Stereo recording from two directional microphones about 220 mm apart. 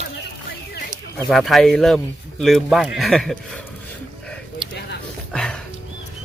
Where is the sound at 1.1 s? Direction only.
Centre (ahead or behind).